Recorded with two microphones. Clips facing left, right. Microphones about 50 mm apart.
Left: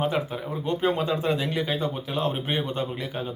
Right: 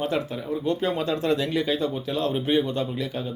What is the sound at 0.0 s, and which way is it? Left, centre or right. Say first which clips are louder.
Speech: even; centre.